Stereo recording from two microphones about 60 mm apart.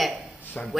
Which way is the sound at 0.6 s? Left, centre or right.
Left.